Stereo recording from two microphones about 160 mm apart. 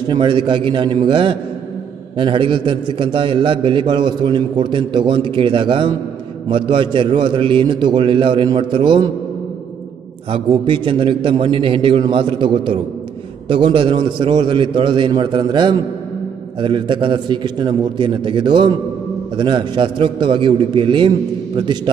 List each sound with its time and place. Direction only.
0.1 s a man's voice: 30° right (ahead or behind)
10.6 s a man's voice: 30° right (ahead or behind)